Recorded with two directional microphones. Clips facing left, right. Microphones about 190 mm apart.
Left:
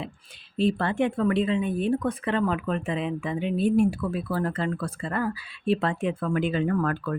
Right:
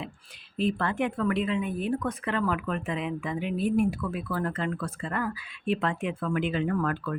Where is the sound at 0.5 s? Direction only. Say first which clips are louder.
Left 3 dB; 30° left (ahead or behind).